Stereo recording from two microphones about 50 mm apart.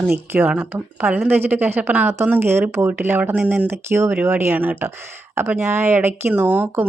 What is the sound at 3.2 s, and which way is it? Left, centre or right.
Speech, right.